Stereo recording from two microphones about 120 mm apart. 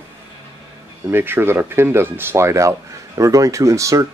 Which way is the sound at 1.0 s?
20° right (ahead or behind).